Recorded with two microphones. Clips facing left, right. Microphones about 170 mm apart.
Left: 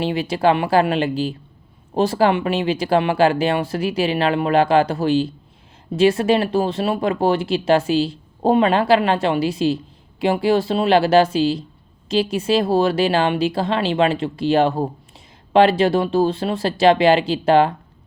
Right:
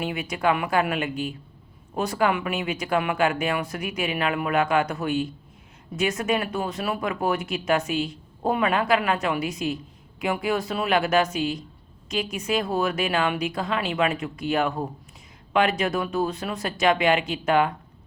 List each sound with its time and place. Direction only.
0.0 s speech: 30° left (ahead or behind)